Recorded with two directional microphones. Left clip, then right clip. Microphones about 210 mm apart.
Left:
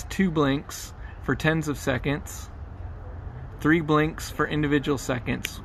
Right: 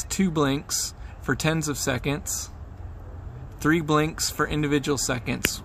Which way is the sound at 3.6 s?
10° right (ahead or behind).